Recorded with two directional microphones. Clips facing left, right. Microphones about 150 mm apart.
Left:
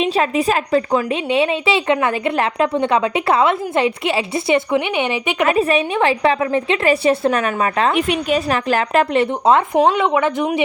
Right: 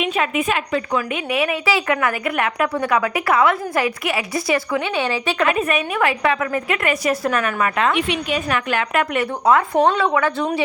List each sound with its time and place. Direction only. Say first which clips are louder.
0.0 s a woman's voice: left 4 dB; 35° left (ahead or behind); by 5.5 s 20° left (ahead or behind)
5.5 s a woman's voice: left 4 dB; 30° left (ahead or behind)
9.7 s speech: left 2 dB; 10° left (ahead or behind)